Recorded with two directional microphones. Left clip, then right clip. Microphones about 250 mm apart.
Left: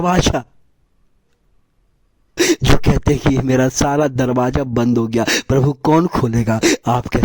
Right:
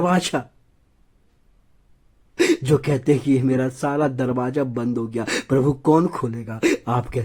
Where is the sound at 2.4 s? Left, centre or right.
Left.